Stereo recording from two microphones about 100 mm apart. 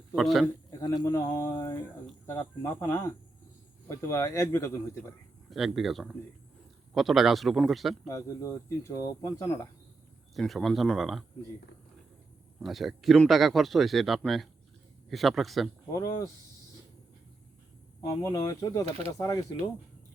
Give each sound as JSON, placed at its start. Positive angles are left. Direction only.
{"t": 0.2, "sound": "speech", "side_deg": 0}
{"t": 0.7, "sound": "speech", "side_deg": 35}
{"t": 5.5, "sound": "speech", "side_deg": -5}
{"t": 8.0, "sound": "speech", "side_deg": 35}
{"t": 10.3, "sound": "speech", "side_deg": 0}
{"t": 12.5, "sound": "speech", "side_deg": 0}
{"t": 16.0, "sound": "speech", "side_deg": 35}
{"t": 18.0, "sound": "speech", "side_deg": 30}